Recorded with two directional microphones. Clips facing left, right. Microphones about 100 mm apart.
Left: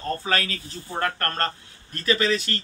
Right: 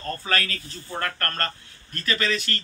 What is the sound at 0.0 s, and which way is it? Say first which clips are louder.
Speech: left 2 dB; 20° left (ahead or behind).